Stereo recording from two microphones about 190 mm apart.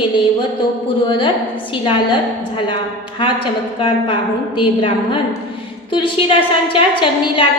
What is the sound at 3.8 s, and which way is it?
A woman's voice, 30° left (ahead or behind).